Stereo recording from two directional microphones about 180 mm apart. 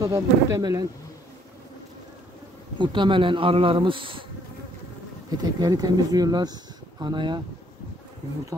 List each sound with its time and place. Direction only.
0.0 s speech: 20° right (ahead or behind)
2.8 s speech: 25° right (ahead or behind)
5.4 s speech: 20° right (ahead or behind)